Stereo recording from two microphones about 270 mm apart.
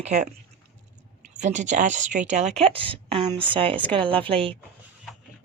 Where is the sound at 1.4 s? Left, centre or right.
Right.